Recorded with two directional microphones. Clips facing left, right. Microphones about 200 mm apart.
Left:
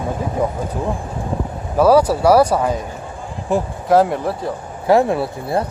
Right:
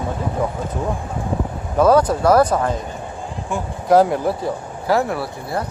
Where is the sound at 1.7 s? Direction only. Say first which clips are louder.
Left 2 dB; 10° left (ahead or behind).